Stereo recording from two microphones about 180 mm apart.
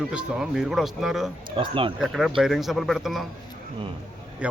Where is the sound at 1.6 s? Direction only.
30° right (ahead or behind).